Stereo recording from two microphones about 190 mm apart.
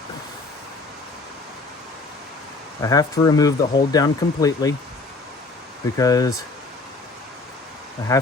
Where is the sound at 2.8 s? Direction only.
20° left (ahead or behind).